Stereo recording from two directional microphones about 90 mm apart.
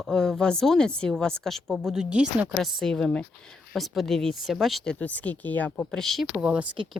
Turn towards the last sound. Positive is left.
turn(degrees=-10)  # may be behind; listen again after turning